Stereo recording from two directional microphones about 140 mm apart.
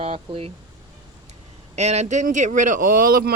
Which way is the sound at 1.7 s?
55° right (ahead or behind).